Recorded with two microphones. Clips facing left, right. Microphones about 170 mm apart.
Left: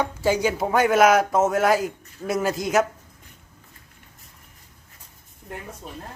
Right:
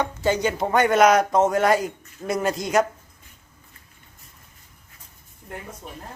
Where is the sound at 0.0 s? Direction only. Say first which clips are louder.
Left 1 dB; 10° left (ahead or behind).